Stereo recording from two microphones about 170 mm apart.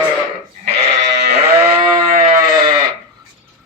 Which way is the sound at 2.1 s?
55° right (ahead or behind).